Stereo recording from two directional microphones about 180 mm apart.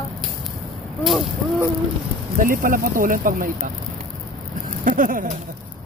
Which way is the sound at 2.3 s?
50° right (ahead or behind).